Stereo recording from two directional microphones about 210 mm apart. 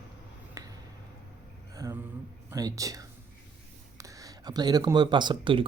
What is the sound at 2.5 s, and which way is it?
Speech, 15° right (ahead or behind).